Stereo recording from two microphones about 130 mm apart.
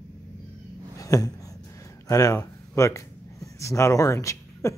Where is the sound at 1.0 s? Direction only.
25° left (ahead or behind).